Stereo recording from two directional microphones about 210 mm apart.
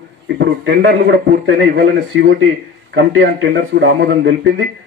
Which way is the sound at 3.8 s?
60° right (ahead or behind).